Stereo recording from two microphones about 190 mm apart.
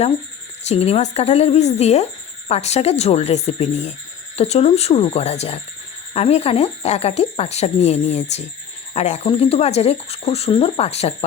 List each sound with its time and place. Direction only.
0.7 s speech: 35° left (ahead or behind)